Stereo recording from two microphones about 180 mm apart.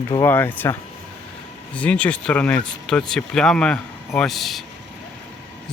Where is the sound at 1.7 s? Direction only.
5° left (ahead or behind).